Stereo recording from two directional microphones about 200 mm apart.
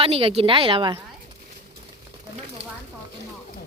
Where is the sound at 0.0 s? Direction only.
30° right (ahead or behind).